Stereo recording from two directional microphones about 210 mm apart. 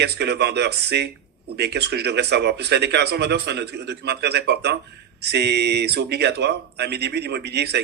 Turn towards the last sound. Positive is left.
turn(degrees=-50)  # may be behind; listen again after turning